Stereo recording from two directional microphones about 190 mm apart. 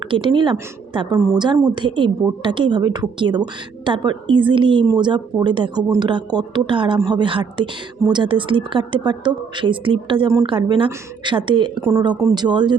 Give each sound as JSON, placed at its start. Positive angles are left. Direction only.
{"t": 0.1, "sound": "speech", "side_deg": -25}